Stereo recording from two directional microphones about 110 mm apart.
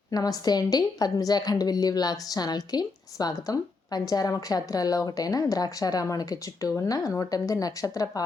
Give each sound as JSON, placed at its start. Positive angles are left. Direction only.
{"t": 0.1, "sound": "a woman's voice", "side_deg": 35}